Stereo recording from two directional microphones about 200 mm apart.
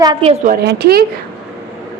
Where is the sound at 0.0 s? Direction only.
25° right (ahead or behind).